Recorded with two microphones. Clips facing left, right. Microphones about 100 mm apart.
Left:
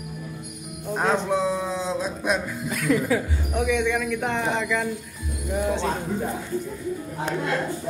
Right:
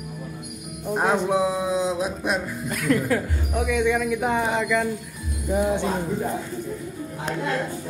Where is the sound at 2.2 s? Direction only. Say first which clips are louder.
Even; centre (ahead or behind).